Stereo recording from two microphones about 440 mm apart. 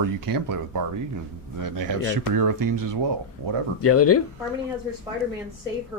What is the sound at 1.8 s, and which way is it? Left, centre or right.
Speech, right.